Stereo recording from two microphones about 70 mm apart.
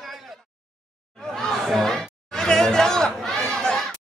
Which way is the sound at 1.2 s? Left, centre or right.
Centre.